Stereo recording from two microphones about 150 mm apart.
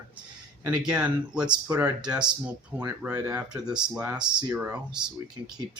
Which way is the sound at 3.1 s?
25° right (ahead or behind).